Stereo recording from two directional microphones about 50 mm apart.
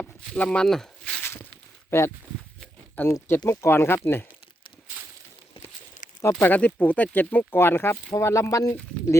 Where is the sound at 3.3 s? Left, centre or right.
Left.